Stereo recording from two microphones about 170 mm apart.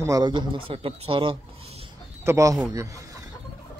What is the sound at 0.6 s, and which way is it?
Speech, 35° right (ahead or behind).